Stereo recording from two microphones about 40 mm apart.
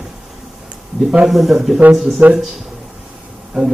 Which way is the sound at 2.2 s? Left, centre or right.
Right.